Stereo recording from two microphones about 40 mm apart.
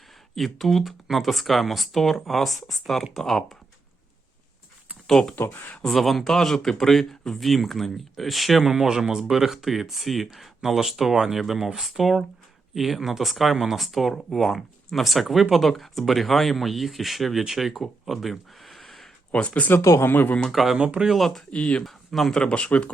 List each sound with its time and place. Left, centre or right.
0.3 s speech: centre
5.0 s speech: centre
5.9 s speech: centre
18.0 s a sound: centre
19.3 s speech: left
19.7 s speech: left
20.5 s speech: centre
20.7 s speech: right
21.5 s speech: left
21.8 s speech: centre
22.4 s speech: left